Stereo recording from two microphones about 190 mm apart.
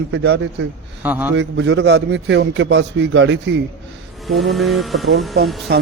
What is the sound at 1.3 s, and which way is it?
A man's voice, 70° right (ahead or behind).